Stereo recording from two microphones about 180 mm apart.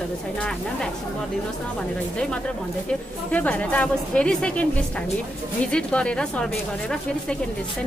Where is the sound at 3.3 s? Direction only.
10° left (ahead or behind).